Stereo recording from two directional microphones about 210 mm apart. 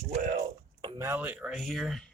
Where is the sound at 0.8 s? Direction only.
20° right (ahead or behind); by 2.0 s centre (ahead or behind).